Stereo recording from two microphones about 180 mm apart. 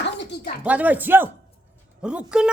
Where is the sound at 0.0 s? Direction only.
75° left (ahead or behind).